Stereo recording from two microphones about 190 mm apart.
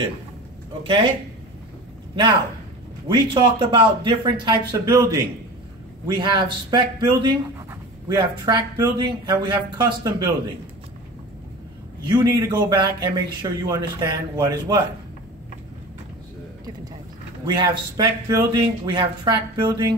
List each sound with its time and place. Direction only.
0.8 s a man's voice: 25° right (ahead or behind)
3.1 s a man's voice: 25° right (ahead or behind)
12.0 s a man's voice: 25° right (ahead or behind)
17.5 s a man's voice: 25° right (ahead or behind)